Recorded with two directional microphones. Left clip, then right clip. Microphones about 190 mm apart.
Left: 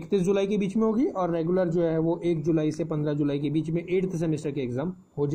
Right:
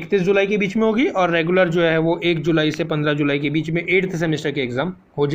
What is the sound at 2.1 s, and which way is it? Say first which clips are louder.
Speech: right 7 dB; 70° right (ahead or behind).